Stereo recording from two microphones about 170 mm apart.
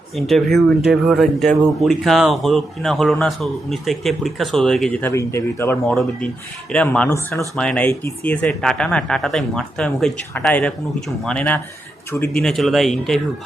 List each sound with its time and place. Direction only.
0.2 s speech: centre (ahead or behind)
7.1 s speech: 15° left (ahead or behind)
7.5 s speech: 5° left (ahead or behind)